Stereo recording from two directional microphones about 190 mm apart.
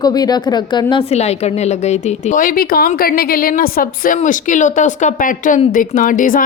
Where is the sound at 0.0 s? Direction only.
20° left (ahead or behind).